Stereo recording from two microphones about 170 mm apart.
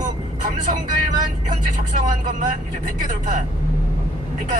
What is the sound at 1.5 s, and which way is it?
Speech, 50° right (ahead or behind).